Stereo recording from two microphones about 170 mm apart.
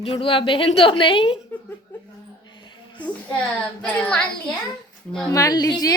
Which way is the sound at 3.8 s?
5° left (ahead or behind).